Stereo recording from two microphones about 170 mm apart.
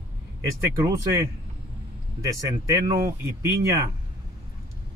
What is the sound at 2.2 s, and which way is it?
Speech, 20° right (ahead or behind).